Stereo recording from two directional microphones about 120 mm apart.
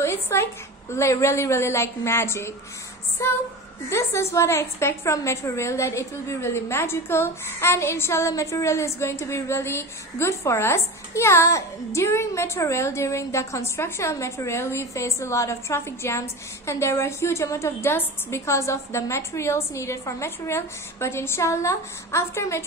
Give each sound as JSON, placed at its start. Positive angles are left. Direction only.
{"t": 0.0, "sound": "a woman's voice", "side_deg": 20}